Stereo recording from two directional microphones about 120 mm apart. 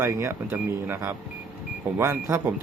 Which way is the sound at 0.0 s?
20° right (ahead or behind).